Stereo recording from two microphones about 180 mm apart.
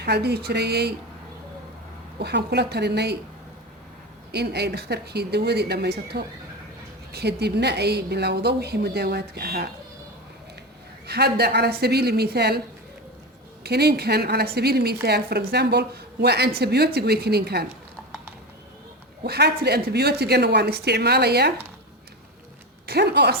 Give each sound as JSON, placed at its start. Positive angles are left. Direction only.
{"t": 0.0, "sound": "a woman's voice", "side_deg": -65}
{"t": 2.1, "sound": "a woman's voice", "side_deg": -65}
{"t": 4.3, "sound": "a woman's voice", "side_deg": -65}
{"t": 11.0, "sound": "a woman's voice", "side_deg": -65}
{"t": 13.7, "sound": "a woman's voice", "side_deg": -65}
{"t": 19.2, "sound": "a woman's voice", "side_deg": -65}
{"t": 22.9, "sound": "a woman's voice", "side_deg": -65}